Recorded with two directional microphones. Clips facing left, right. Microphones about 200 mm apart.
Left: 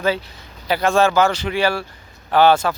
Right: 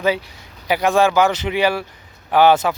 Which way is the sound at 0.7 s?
15° right (ahead or behind).